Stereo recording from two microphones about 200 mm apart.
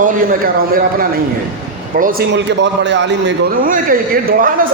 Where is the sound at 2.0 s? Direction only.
45° right (ahead or behind); by 3.3 s 65° right (ahead or behind).